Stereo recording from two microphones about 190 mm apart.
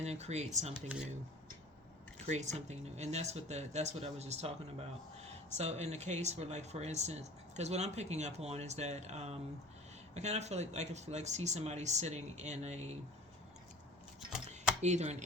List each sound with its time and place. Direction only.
0.0 s speech: 35° right (ahead or behind)
2.1 s speech: 35° right (ahead or behind)
14.8 s speech: 35° right (ahead or behind)